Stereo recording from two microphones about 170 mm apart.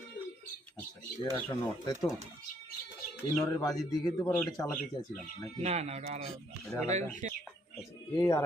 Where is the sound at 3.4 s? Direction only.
20° left (ahead or behind).